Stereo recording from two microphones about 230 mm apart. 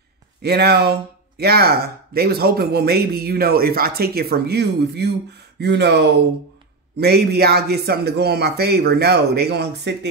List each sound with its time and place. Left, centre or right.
0.4 s speech: right